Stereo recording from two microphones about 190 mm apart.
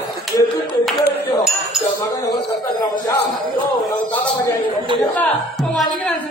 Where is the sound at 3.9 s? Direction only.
10° left (ahead or behind).